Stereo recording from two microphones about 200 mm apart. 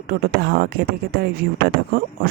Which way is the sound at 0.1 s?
50° right (ahead or behind).